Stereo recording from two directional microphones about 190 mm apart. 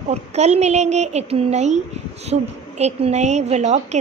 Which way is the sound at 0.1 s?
35° right (ahead or behind).